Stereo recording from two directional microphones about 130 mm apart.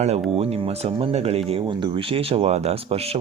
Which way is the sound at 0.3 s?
50° right (ahead or behind).